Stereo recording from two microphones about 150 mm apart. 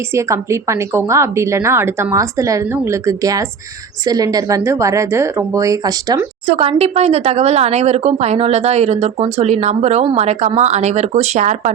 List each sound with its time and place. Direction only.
0.1 s a woman's voice: 20° right (ahead or behind)
6.5 s speech: 40° right (ahead or behind)